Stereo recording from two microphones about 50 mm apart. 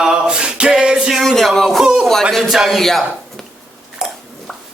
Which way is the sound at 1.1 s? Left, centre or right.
Centre.